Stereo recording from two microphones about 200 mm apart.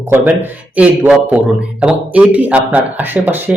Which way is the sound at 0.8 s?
5° right (ahead or behind).